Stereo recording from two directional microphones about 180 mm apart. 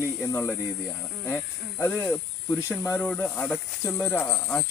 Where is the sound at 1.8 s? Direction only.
10° left (ahead or behind).